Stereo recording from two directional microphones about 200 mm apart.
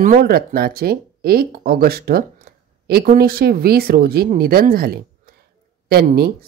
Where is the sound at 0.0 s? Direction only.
45° right (ahead or behind).